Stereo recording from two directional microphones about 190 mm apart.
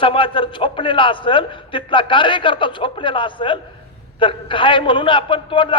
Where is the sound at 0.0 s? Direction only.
25° left (ahead or behind).